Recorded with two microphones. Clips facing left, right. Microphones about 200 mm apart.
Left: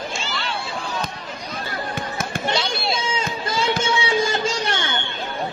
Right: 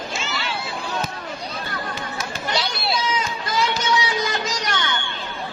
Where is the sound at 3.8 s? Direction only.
30° left (ahead or behind).